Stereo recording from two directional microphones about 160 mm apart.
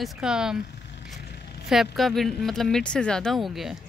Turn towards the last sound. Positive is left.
turn(degrees=0)  # may be behind; listen again after turning